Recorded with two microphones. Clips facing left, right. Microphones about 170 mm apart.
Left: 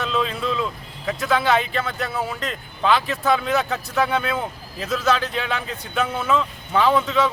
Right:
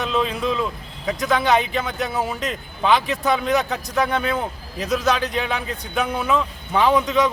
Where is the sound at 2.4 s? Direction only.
5° right (ahead or behind).